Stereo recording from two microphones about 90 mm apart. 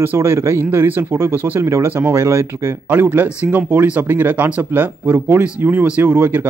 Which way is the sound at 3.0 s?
20° right (ahead or behind).